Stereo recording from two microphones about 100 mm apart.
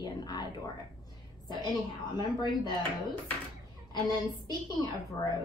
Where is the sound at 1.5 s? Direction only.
45° left (ahead or behind).